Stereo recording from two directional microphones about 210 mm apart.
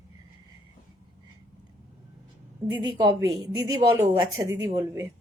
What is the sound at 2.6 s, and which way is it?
A woman's voice, 20° right (ahead or behind).